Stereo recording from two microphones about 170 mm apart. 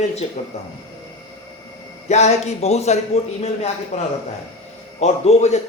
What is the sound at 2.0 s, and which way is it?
A man's voice, 40° left (ahead or behind).